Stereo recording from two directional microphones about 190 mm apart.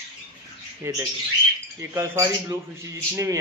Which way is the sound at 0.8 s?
20° right (ahead or behind).